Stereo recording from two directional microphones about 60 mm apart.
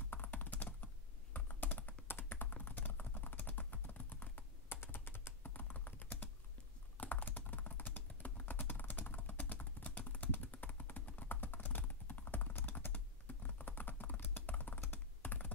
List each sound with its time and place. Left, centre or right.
0.1 s computer keyboard: left
2.5 s typing: left